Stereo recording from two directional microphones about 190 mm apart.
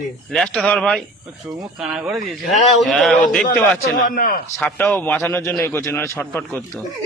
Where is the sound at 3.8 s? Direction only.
50° left (ahead or behind).